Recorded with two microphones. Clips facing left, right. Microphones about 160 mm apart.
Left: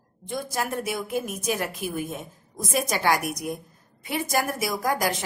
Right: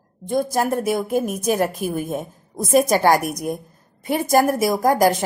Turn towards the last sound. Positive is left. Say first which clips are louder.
# right 9 dB
turn(degrees=-45)  # may be behind; listen again after turning